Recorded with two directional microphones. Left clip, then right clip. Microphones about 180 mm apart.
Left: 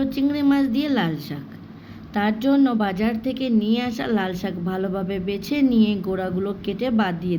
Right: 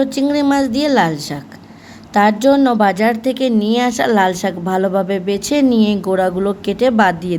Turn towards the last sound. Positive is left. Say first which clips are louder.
# right 10 dB
turn(degrees=-30)  # may be behind; listen again after turning